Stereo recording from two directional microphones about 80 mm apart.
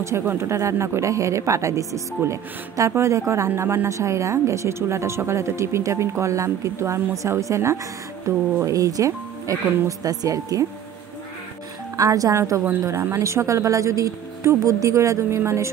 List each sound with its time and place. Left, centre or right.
0.0 s a woman's voice: right
12.0 s a woman's voice: right